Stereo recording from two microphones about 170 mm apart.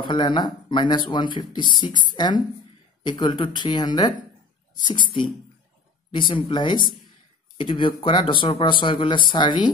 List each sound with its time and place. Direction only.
0.0 s speech: 30° left (ahead or behind)